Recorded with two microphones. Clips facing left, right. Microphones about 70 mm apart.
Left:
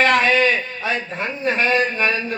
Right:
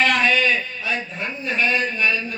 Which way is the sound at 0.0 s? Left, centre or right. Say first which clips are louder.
Left 3 dB; left.